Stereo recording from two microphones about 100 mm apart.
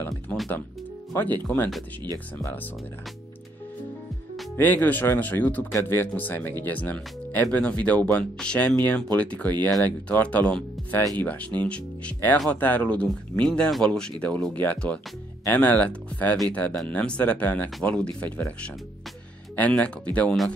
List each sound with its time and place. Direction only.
0.3 s music: 10° left (ahead or behind)
1.1 s speech: 15° left (ahead or behind)
4.6 s speech: 20° left (ahead or behind)
19.5 s speech: 15° left (ahead or behind)